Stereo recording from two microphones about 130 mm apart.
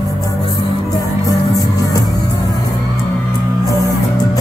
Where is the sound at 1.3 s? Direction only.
25° left (ahead or behind).